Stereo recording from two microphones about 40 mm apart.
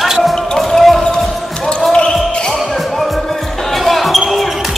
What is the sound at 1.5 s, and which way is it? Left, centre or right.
Basketball bounce, left.